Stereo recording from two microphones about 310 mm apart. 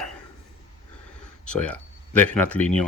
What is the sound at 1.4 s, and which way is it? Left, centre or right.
Speech, centre.